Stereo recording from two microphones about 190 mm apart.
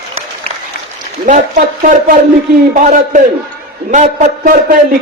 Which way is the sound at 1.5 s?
50° right (ahead or behind).